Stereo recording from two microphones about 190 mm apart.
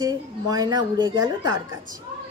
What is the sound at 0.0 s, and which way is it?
A woman's voice, 20° right (ahead or behind).